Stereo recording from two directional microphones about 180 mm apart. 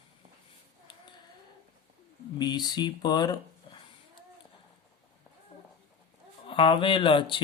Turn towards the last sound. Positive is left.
turn(degrees=30)  # may be behind; listen again after turning